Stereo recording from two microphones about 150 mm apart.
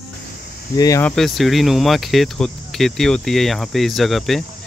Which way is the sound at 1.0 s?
Centre (ahead or behind).